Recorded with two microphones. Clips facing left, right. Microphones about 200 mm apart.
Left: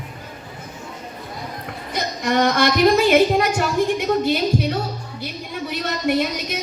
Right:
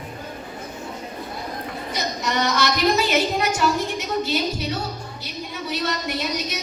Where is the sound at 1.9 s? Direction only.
55° left (ahead or behind).